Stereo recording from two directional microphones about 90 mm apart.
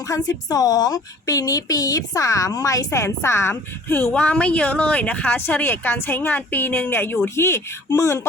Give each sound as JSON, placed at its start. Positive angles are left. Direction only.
{"t": 0.1, "sound": "a woman's voice", "side_deg": 40}